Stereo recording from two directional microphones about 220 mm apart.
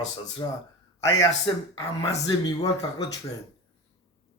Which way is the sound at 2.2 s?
20° left (ahead or behind).